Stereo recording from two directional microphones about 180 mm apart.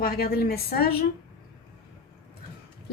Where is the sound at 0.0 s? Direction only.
55° left (ahead or behind).